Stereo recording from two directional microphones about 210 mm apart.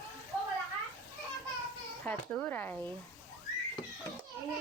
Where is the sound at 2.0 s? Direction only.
10° left (ahead or behind).